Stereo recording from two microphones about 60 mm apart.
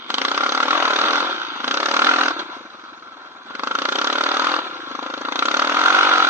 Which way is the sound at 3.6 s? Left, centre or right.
Right.